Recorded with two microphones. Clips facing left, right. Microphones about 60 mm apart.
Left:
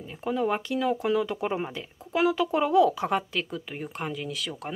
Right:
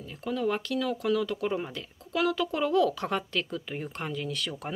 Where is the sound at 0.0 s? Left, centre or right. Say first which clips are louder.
Left 2 dB; left.